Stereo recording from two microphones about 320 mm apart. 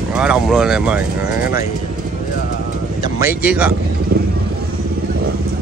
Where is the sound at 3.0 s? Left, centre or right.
Centre.